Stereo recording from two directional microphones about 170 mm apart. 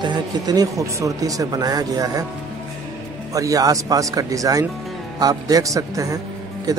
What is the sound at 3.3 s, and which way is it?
Speech, 20° right (ahead or behind).